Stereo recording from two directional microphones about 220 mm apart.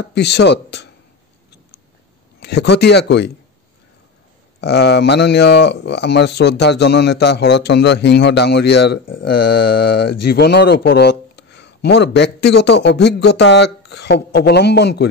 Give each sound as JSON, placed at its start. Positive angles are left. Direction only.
{"t": 0.0, "sound": "speech", "side_deg": 50}
{"t": 2.4, "sound": "speech", "side_deg": 50}
{"t": 4.6, "sound": "speech", "side_deg": 50}